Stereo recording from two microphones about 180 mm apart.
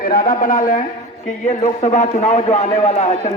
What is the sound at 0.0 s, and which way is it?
A man's voice, 50° left (ahead or behind).